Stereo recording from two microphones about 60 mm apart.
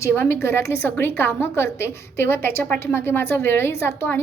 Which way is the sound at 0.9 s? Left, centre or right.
Left.